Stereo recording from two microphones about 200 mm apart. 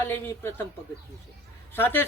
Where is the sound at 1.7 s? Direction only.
10° left (ahead or behind).